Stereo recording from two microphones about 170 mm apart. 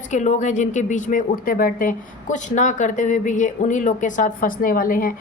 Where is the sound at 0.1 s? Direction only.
45° left (ahead or behind).